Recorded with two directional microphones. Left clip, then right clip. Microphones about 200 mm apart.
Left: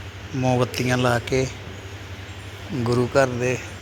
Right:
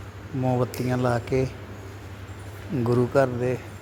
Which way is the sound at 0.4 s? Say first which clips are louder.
Left 4 dB; 5° right (ahead or behind).